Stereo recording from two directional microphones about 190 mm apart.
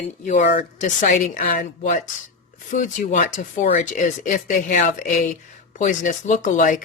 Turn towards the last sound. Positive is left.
turn(degrees=40)  # may be behind; listen again after turning